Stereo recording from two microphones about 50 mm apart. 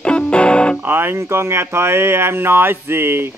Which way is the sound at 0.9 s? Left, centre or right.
Right.